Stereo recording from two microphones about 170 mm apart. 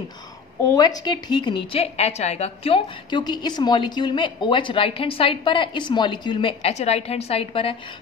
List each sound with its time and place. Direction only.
0.7 s speech: 20° left (ahead or behind)
1.7 s a woman's voice: 40° left (ahead or behind)